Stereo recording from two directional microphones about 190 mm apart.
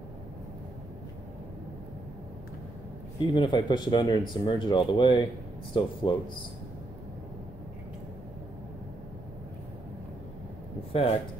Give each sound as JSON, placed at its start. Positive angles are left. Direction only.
{"t": 3.3, "sound": "speech", "side_deg": 25}
{"t": 10.9, "sound": "speech", "side_deg": 30}